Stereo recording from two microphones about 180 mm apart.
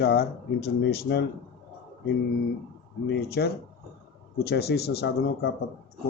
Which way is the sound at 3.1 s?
65° left (ahead or behind).